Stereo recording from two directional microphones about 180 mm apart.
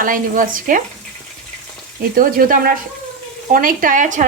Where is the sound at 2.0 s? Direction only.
50° right (ahead or behind).